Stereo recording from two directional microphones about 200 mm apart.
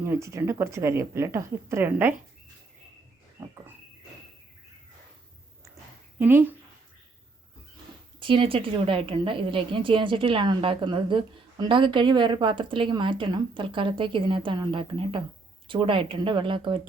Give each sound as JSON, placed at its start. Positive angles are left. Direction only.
{"t": 0.0, "sound": "a woman's voice", "side_deg": -15}
{"t": 6.1, "sound": "a woman's voice", "side_deg": -10}
{"t": 8.2, "sound": "a woman's voice", "side_deg": -25}